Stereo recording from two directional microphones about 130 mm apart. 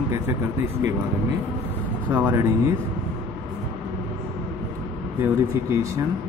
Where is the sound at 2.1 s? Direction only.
15° right (ahead or behind).